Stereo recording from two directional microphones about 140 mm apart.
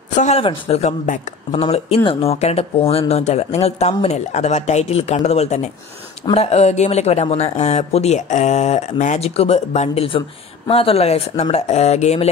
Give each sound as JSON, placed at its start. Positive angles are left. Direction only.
{"t": 0.1, "sound": "speech", "side_deg": 55}
{"t": 0.4, "sound": "speech", "side_deg": 45}
{"t": 1.0, "sound": "speech", "side_deg": 65}
{"t": 1.6, "sound": "speech", "side_deg": 45}